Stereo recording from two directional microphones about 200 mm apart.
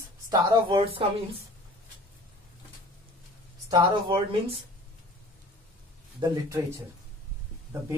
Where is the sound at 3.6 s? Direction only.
20° right (ahead or behind).